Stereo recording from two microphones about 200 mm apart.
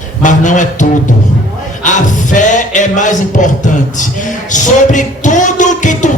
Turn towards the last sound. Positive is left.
turn(degrees=40)  # may be behind; listen again after turning